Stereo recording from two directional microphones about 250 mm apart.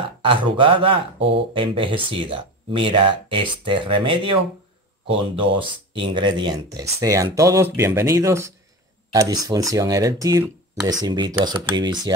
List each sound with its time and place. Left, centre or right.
0.0 s speech: centre